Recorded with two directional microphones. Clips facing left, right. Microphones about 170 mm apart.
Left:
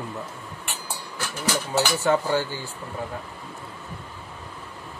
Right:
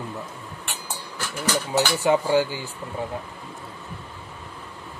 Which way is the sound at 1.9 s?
15° right (ahead or behind).